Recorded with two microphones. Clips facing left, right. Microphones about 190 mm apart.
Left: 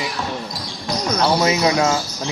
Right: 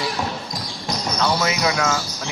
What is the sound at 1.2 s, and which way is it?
Speech, 30° left (ahead or behind).